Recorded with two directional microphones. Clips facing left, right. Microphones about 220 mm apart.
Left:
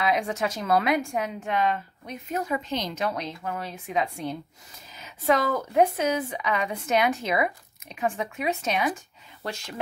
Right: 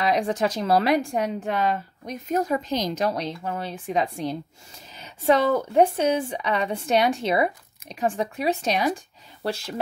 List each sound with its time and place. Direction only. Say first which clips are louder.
0.0 s a woman's voice: right 3 dB; 35° right (ahead or behind)